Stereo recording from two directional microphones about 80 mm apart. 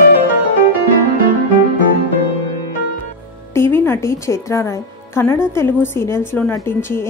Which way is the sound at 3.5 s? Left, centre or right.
Left.